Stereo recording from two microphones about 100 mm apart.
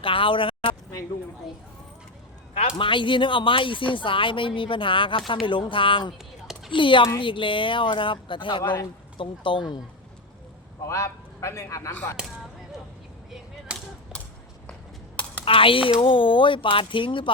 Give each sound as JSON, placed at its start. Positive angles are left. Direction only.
{"t": 0.0, "sound": "speech", "side_deg": 60}
{"t": 2.6, "sound": "speech", "side_deg": 60}
{"t": 10.8, "sound": "a man's voice", "side_deg": 30}
{"t": 14.1, "sound": "a sound", "side_deg": 10}
{"t": 15.4, "sound": "speech", "side_deg": 65}